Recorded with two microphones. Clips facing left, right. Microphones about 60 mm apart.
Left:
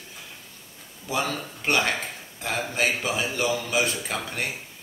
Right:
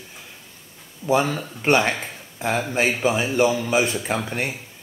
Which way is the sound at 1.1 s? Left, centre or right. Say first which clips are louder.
Right 7 dB; right.